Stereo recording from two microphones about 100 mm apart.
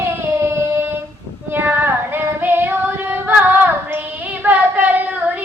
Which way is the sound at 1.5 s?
20° right (ahead or behind).